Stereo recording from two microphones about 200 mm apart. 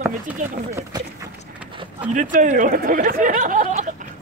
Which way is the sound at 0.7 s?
15° right (ahead or behind).